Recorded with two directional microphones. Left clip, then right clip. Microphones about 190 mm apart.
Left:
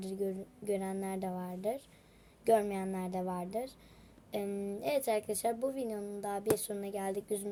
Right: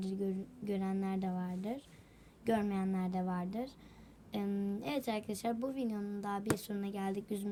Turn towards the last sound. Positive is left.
turn(degrees=15)  # may be behind; listen again after turning